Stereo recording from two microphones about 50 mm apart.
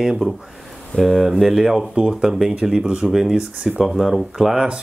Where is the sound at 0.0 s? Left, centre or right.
Centre.